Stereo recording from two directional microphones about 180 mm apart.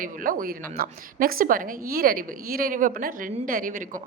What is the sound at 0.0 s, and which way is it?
A woman's voice, 50° right (ahead or behind).